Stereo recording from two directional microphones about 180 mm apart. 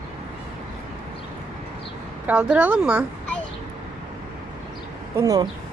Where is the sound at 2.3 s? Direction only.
10° right (ahead or behind).